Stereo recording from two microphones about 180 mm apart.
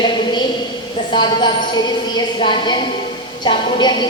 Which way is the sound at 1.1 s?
25° left (ahead or behind).